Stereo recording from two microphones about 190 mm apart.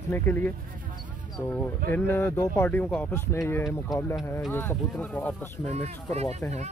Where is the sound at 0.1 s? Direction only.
10° left (ahead or behind).